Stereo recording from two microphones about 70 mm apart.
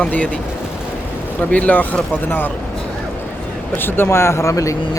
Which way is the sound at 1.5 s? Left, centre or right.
Left.